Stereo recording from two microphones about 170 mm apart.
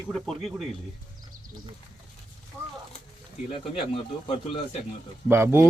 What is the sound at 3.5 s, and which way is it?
Speech, 30° left (ahead or behind).